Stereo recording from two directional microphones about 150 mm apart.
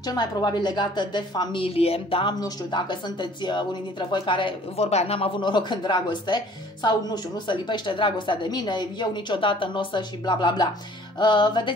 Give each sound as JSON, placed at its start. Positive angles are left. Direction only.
{"t": 0.0, "sound": "a woman's voice", "side_deg": 25}